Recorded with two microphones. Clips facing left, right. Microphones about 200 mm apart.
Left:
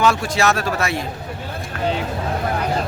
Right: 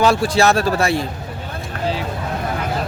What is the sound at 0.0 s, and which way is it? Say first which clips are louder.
Speech: right 3 dB; 35° right (ahead or behind).